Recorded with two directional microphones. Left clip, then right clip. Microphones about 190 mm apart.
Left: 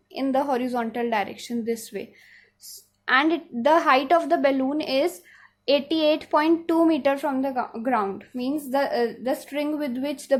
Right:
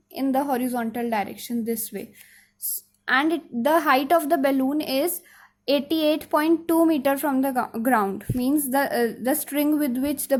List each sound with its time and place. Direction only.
0.1 s speech: 20° right (ahead or behind)
3.1 s speech: 20° right (ahead or behind)